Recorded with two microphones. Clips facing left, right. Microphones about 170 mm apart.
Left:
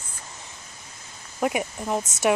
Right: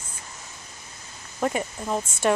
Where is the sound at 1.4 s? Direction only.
10° left (ahead or behind).